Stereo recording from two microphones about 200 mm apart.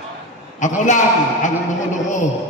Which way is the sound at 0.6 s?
40° left (ahead or behind).